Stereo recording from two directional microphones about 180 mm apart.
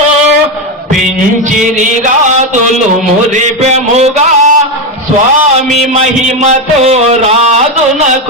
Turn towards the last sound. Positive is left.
turn(degrees=-35)  # may be behind; listen again after turning